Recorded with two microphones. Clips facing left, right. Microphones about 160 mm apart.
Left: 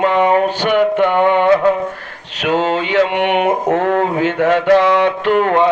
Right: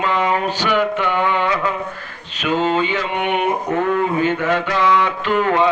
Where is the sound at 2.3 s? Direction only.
75° left (ahead or behind).